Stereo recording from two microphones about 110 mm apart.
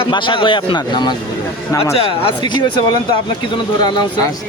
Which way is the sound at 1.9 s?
60° left (ahead or behind).